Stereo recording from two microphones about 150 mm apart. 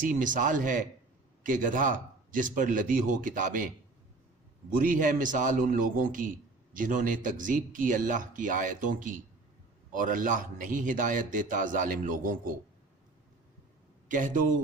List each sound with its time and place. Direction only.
0.0 s a man's voice: 60° right (ahead or behind)
4.7 s a man's voice: 65° right (ahead or behind)
14.1 s a man's voice: 60° right (ahead or behind)